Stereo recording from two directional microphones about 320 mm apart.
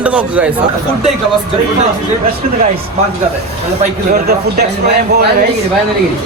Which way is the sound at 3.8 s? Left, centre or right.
Right.